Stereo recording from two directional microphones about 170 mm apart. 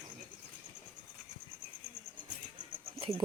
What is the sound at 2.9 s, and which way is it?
Goat, 35° right (ahead or behind).